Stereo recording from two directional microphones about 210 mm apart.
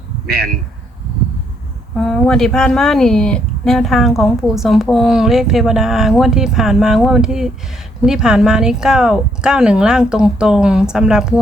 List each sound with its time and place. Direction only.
0.3 s speech: 45° right (ahead or behind)
2.0 s speech: centre (ahead or behind)